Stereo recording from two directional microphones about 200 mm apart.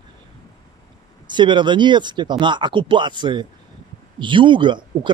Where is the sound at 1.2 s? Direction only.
25° right (ahead or behind).